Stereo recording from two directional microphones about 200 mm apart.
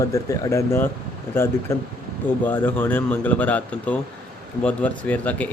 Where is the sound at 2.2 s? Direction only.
10° left (ahead or behind).